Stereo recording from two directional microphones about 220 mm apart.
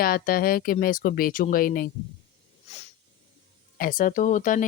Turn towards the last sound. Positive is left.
turn(degrees=35)  # may be behind; listen again after turning